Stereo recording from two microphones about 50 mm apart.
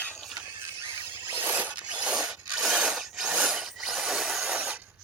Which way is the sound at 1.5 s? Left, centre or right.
Right.